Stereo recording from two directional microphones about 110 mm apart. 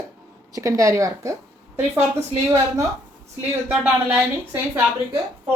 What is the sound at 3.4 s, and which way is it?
A woman's voice, 15° right (ahead or behind).